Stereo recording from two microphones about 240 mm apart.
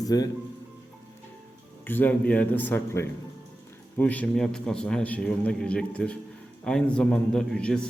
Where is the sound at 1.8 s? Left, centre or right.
Centre.